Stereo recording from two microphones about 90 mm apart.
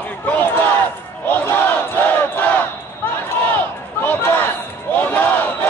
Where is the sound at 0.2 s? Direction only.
20° left (ahead or behind).